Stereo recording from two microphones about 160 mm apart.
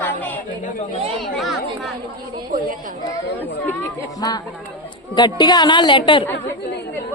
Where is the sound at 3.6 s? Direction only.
10° left (ahead or behind).